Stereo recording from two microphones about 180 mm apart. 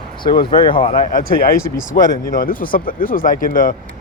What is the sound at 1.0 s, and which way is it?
Speech, 50° left (ahead or behind).